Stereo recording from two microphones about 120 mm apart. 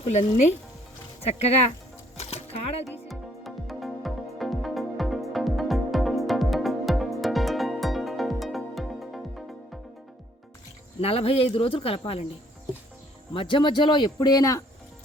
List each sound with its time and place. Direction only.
0.0 s speech: 70° left (ahead or behind)
1.2 s speech: 60° left (ahead or behind)
2.1 s a sound: 60° left (ahead or behind)
2.8 s music: centre (ahead or behind)
11.0 s speech: 55° left (ahead or behind)
13.3 s speech: 45° left (ahead or behind)